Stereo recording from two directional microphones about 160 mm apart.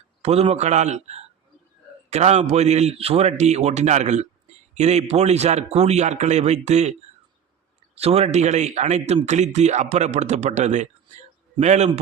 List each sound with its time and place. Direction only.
0.2 s a man's voice: 40° right (ahead or behind)
7.9 s a man's voice: 40° right (ahead or behind)